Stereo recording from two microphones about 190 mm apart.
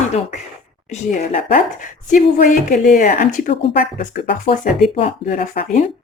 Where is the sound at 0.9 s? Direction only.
35° left (ahead or behind).